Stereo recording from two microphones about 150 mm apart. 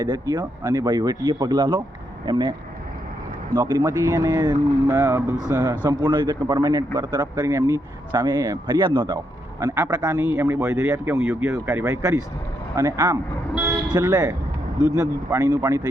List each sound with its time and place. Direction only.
0.0 s a man's voice: 25° right (ahead or behind)
5.6 s a man's voice: 25° right (ahead or behind)
10.2 s a man's voice: 15° right (ahead or behind)
13.5 s vehicle: 15° right (ahead or behind)
13.8 s a man's voice: 25° right (ahead or behind)